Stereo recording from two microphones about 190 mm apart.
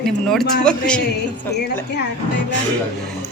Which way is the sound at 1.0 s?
60° left (ahead or behind).